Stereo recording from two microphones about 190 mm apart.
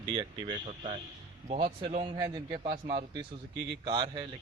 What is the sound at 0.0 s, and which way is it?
Speech, 25° right (ahead or behind).